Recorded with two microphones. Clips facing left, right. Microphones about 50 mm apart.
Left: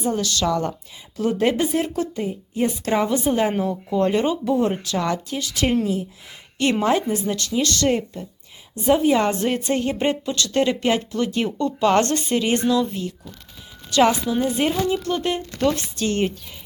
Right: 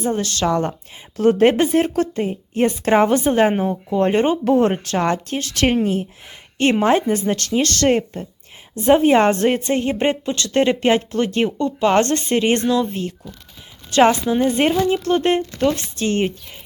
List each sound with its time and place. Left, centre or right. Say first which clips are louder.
0.1 s a woman's voice: right 1 dB; right
1.1 s speech: right 6 dB; right
3.5 s speech: right 3 dB; right
3.9 s a woman's voice: right 3 dB; right
4.4 s speech: right 5 dB; right
6.6 s a woman's voice: right 4 dB; right
7.3 s a woman's voice: right 3 dB; right
11.6 s a woman's voice: right 1 dB; right
14.4 s speech: right 5 dB; right
14.7 s a woman's voice: right 5 dB; right